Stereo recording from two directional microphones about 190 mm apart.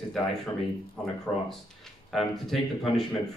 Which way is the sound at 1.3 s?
10° left (ahead or behind).